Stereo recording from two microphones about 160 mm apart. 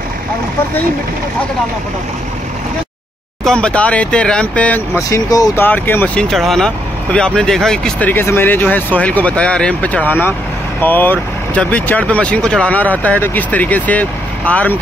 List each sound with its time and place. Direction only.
3.4 s speech: 5° left (ahead or behind)
5.3 s speech: 25° left (ahead or behind)
5.7 s speech: 10° left (ahead or behind)